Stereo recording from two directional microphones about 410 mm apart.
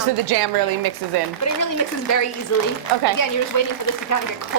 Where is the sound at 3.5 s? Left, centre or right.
Left.